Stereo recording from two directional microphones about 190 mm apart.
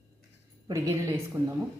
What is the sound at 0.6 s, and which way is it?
Speech, 15° right (ahead or behind).